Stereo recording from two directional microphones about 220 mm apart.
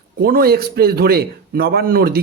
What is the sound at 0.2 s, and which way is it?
A man's voice, 45° right (ahead or behind).